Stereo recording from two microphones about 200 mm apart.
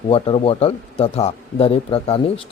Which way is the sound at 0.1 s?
30° left (ahead or behind).